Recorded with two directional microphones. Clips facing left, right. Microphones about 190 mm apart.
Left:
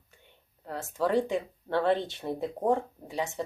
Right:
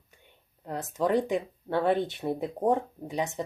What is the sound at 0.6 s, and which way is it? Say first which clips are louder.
Speech: right 1 dB; 20° right (ahead or behind).